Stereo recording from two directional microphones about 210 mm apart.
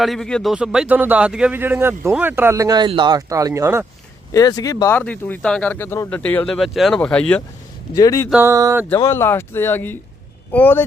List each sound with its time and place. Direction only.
0.0 s a man's voice: centre (ahead or behind)
4.3 s speech: 15° left (ahead or behind)
7.9 s speech: 15° left (ahead or behind)
8.3 s a man's voice: 10° right (ahead or behind)
9.0 s speech: 15° left (ahead or behind)